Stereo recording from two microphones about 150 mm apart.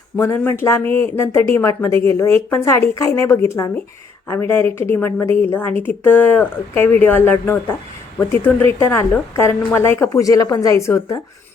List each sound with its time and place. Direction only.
0.2 s speech: 15° left (ahead or behind)